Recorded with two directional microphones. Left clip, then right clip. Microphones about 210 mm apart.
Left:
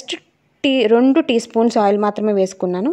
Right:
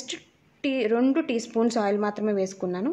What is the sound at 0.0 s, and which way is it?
A woman's voice, 35° left (ahead or behind).